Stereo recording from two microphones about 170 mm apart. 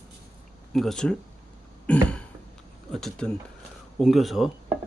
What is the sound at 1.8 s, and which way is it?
Throat clearing, 5° left (ahead or behind).